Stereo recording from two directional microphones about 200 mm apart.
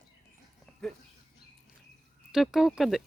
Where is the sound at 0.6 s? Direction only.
Centre (ahead or behind).